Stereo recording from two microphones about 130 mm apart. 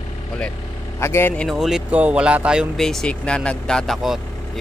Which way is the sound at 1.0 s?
20° left (ahead or behind).